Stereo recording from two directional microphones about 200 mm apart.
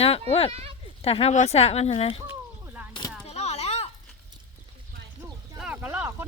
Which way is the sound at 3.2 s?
30° left (ahead or behind).